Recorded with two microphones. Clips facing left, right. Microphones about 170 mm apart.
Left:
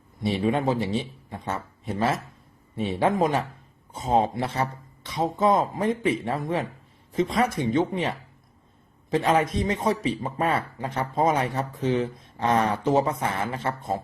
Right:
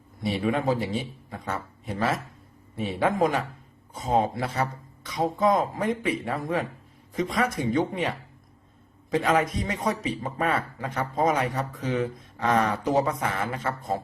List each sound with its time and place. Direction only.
0.3 s a man's voice: 25° left (ahead or behind)